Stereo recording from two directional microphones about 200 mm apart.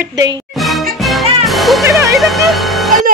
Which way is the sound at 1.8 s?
15° right (ahead or behind).